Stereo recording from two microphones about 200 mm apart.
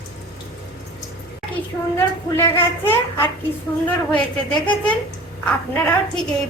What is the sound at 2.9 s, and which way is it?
Speech, 10° left (ahead or behind).